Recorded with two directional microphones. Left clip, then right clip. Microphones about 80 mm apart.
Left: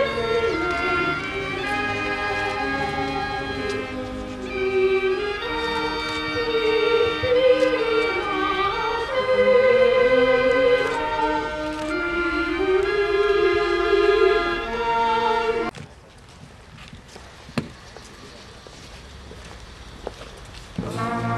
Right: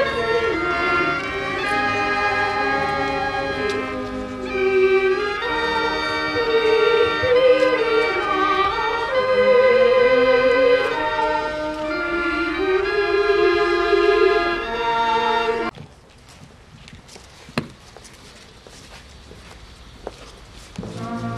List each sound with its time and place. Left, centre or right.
0.0 s music: right
17.6 s chop: right
20.1 s walk: centre
20.8 s music: left